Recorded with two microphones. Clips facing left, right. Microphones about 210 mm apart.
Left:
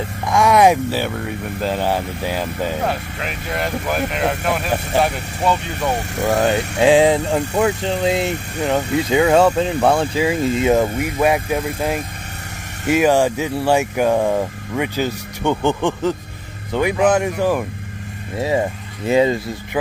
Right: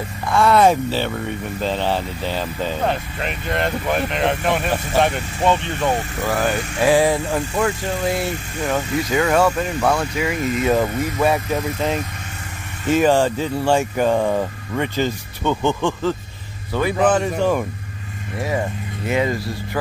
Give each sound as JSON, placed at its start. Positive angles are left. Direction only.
{"t": 0.3, "sound": "speech", "side_deg": 15}
{"t": 6.2, "sound": "speech", "side_deg": 20}
{"t": 10.7, "sound": "speech", "side_deg": 15}
{"t": 19.0, "sound": "speech", "side_deg": 25}